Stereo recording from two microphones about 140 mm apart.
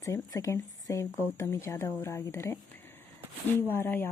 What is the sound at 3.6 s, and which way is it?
Speech, 15° left (ahead or behind).